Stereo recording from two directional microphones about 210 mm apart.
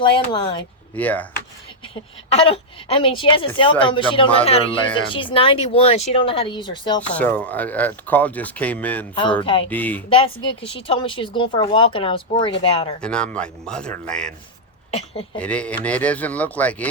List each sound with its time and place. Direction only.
0.0 s speech: 20° left (ahead or behind)
0.9 s speech: 5° left (ahead or behind)
2.3 s speech: 25° left (ahead or behind)
7.0 s speech: 5° left (ahead or behind)
9.4 s speech: 25° left (ahead or behind)
9.6 s speech: 10° left (ahead or behind)
10.1 s speech: 25° left (ahead or behind)
13.0 s speech: 5° left (ahead or behind)
14.8 s speech: 25° left (ahead or behind)
15.4 s speech: 5° left (ahead or behind)